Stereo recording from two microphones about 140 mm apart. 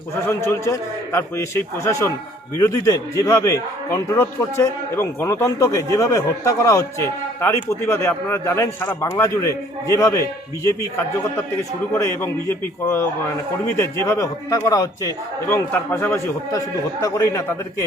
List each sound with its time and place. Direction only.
0.3 s a man's voice: 20° left (ahead or behind)
13.7 s a man's voice: 20° left (ahead or behind)